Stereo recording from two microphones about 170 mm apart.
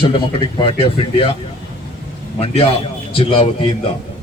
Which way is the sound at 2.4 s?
35° left (ahead or behind).